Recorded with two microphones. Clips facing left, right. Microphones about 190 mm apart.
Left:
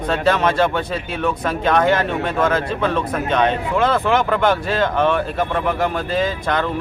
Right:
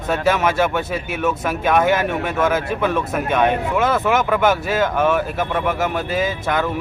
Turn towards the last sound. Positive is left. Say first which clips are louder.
# even
turn(degrees=-5)  # may be behind; listen again after turning